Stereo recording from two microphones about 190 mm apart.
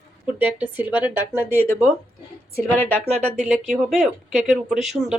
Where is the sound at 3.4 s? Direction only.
Centre (ahead or behind).